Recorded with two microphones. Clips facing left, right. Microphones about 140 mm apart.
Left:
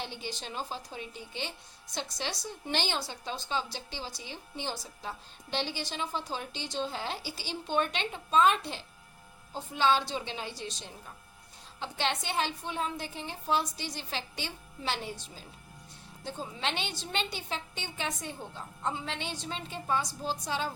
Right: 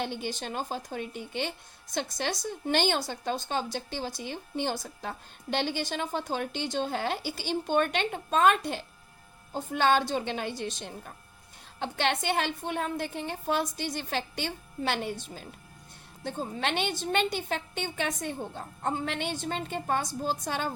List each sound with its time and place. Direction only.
0.0 s a woman's voice: 55° right (ahead or behind)